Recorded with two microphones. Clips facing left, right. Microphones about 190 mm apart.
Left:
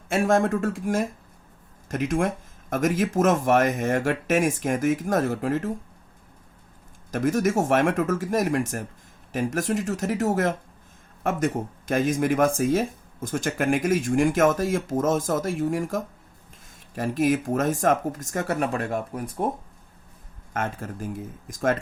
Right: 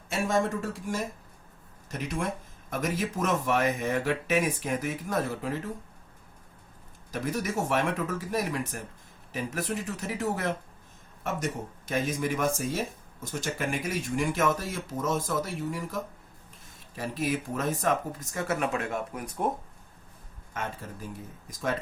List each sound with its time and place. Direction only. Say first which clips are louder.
0.1 s speech: left 6 dB; 50° left (ahead or behind)
7.1 s speech: left 8 dB; 45° left (ahead or behind)
20.5 s speech: left 6 dB; 50° left (ahead or behind)